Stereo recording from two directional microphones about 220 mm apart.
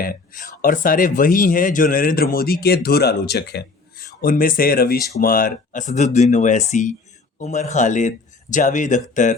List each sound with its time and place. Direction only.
0.0 s speech: 40° left (ahead or behind)